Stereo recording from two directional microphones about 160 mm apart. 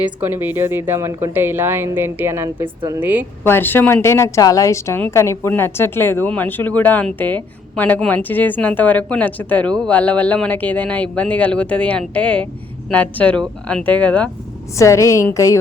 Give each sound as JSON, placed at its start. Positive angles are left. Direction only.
{"t": 0.0, "sound": "a woman's voice", "side_deg": -15}
{"t": 3.4, "sound": "a woman's voice", "side_deg": 15}
{"t": 14.8, "sound": "a woman's voice", "side_deg": 20}